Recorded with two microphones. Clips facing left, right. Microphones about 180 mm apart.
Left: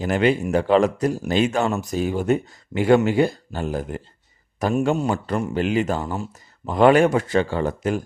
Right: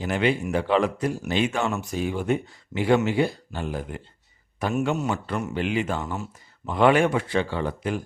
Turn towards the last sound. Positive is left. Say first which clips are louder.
# left 4 dB
turn(degrees=45)  # may be behind; listen again after turning